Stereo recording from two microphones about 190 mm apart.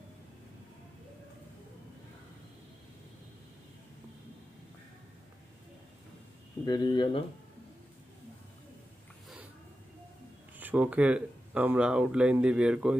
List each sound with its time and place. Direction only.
6.6 s speech: 25° left (ahead or behind)
10.6 s speech: 5° right (ahead or behind)